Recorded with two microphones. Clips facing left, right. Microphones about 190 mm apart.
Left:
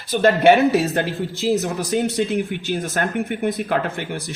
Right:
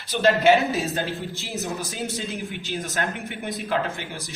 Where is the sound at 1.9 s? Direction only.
60° left (ahead or behind).